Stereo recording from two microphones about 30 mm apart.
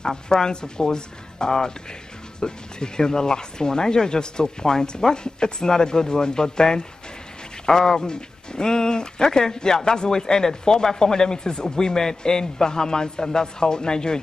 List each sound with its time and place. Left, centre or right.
0.0 s a man's voice: left